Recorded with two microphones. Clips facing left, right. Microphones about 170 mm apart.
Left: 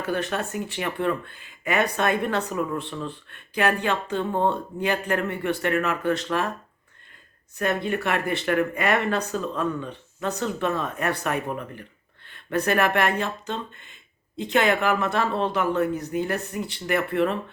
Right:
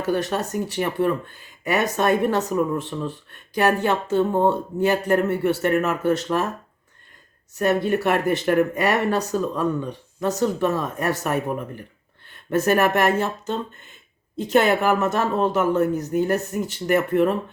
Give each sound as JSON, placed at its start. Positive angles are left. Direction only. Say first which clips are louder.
{"t": 0.0, "sound": "speech", "louder": "right 4 dB", "side_deg": -40}
{"t": 7.6, "sound": "speech", "louder": "right 5 dB", "side_deg": -40}
{"t": 12.5, "sound": "speech", "louder": "right 4 dB", "side_deg": -40}